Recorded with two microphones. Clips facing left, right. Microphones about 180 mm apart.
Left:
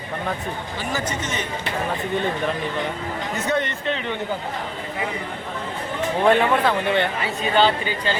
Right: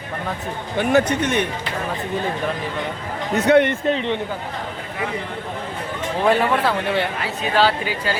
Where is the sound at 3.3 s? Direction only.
65° right (ahead or behind).